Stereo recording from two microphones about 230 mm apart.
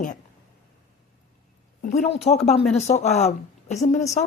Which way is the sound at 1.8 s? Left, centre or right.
Left.